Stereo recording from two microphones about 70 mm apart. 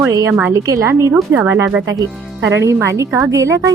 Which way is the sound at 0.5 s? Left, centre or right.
Right.